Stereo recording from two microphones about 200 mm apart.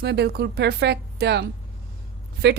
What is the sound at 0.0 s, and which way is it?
A woman's voice, 55° right (ahead or behind).